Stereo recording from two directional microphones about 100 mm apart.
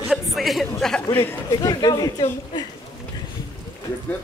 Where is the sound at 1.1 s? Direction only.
20° left (ahead or behind).